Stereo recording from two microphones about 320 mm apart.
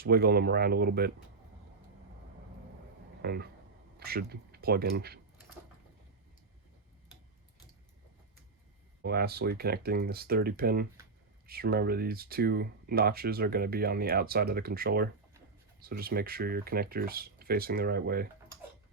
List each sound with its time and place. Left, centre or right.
0.0 s speech: right
3.2 s speech: right
9.0 s speech: right